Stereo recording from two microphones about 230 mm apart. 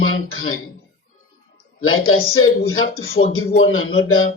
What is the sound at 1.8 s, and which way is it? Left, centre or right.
Speech, left.